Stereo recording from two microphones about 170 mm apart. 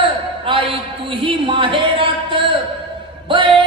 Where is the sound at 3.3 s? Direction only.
30° right (ahead or behind).